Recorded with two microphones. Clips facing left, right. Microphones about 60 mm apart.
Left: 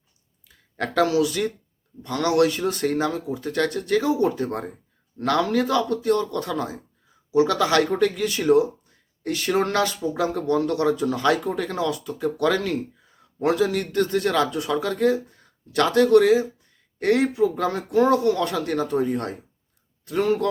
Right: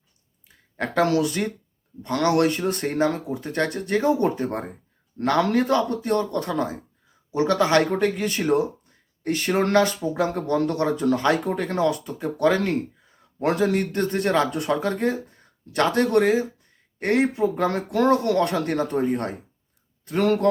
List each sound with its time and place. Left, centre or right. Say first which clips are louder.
0.4 s a sound: even; right
1.0 s speech: left 1 dB; right
3.4 s speech: left 1 dB; right
14.4 s speech: even; right
14.7 s speech: left 2 dB; right
17.7 s speech: left 1 dB; right
19.0 s speech: right 1 dB; right
20.1 s speech: right 1 dB; right